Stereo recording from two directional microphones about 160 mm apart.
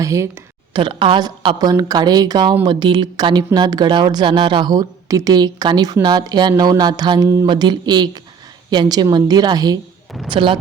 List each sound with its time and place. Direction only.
0.0 s speech: 20° right (ahead or behind)
0.7 s speech: 30° right (ahead or behind)